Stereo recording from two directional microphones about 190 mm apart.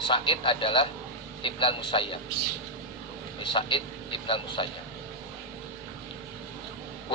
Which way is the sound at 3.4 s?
25° left (ahead or behind).